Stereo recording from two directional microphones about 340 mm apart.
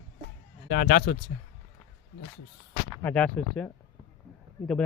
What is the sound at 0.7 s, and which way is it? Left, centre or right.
Speech, left.